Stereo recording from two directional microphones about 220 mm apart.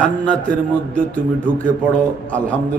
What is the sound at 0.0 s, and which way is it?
A man's voice, 5° left (ahead or behind).